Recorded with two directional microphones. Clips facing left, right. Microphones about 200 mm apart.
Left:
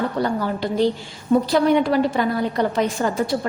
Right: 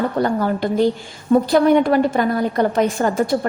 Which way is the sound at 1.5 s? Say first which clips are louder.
Right 5 dB; 50° right (ahead or behind).